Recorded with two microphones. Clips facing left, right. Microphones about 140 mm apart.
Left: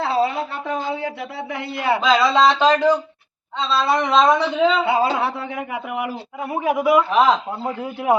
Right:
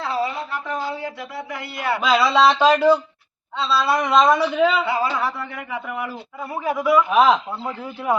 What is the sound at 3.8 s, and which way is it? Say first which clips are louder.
Speech: left 1 dB; 25° left (ahead or behind).